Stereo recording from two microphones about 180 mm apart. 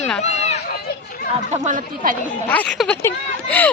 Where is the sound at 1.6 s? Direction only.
45° right (ahead or behind).